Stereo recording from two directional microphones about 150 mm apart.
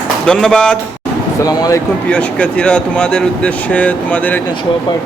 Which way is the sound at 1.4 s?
25° left (ahead or behind).